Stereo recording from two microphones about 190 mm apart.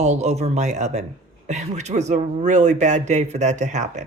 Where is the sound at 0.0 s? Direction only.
35° right (ahead or behind).